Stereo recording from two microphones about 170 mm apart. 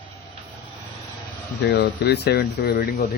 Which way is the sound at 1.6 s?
75° left (ahead or behind).